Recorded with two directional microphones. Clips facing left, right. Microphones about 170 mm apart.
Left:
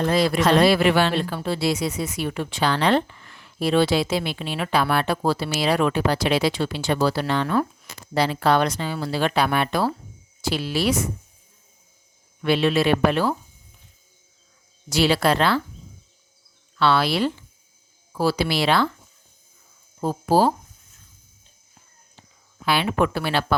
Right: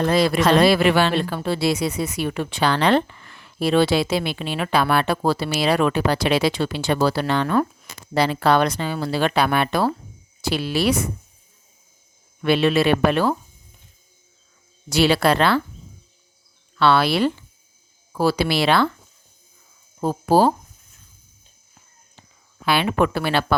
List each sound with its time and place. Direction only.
0.0 s speech: 75° right (ahead or behind)
12.4 s speech: 60° right (ahead or behind)
14.8 s speech: 60° right (ahead or behind)
16.7 s speech: 60° right (ahead or behind)
20.0 s speech: 55° right (ahead or behind)
22.6 s speech: 60° right (ahead or behind)